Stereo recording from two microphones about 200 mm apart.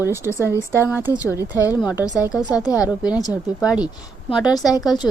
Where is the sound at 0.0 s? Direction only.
10° right (ahead or behind).